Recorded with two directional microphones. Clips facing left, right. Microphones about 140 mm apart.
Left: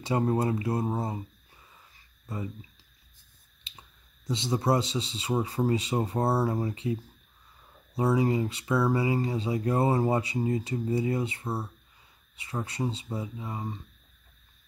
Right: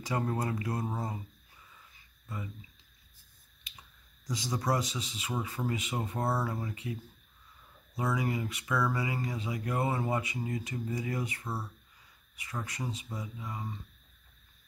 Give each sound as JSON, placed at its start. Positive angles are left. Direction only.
{"t": 0.0, "sound": "speech", "side_deg": 25}
{"t": 2.2, "sound": "speech", "side_deg": 30}
{"t": 3.7, "sound": "finger snapping", "side_deg": 30}
{"t": 4.3, "sound": "speech", "side_deg": 25}